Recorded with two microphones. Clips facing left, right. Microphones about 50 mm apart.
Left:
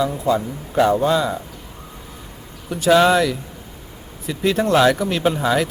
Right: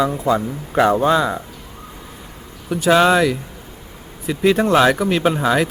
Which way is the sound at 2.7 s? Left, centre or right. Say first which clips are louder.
Right 1 dB; centre.